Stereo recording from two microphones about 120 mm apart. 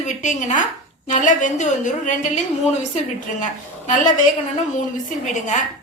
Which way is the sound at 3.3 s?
90° left.